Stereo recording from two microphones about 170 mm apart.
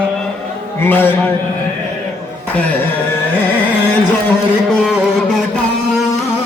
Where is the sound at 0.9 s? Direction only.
15° left (ahead or behind).